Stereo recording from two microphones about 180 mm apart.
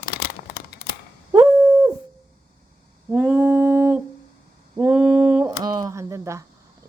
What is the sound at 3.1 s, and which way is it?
Humming, 10° right (ahead or behind).